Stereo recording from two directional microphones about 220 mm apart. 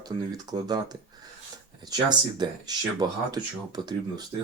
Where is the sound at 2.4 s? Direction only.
20° right (ahead or behind).